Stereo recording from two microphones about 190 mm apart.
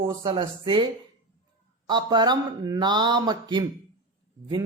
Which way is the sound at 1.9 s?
20° right (ahead or behind).